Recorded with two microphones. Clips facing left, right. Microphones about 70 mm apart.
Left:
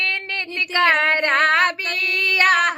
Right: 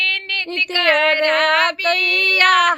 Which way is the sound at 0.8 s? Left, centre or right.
Left.